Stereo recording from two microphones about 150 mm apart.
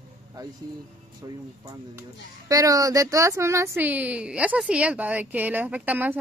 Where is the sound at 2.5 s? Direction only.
20° right (ahead or behind).